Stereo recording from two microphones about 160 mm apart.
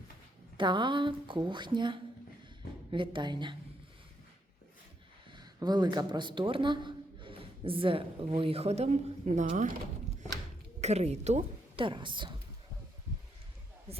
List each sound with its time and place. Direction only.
0.5 s a woman's voice: 30° right (ahead or behind)
5.3 s a man's voice: 25° right (ahead or behind); by 9.7 s 50° right (ahead or behind)
10.8 s a woman's voice: 45° right (ahead or behind)
11.9 s a woman's voice: 30° right (ahead or behind)
13.9 s speech: 40° right (ahead or behind)